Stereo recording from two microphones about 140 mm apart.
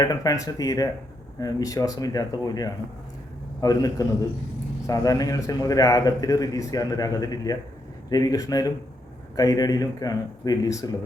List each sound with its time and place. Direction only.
0.0 s a man's voice: 25° left (ahead or behind)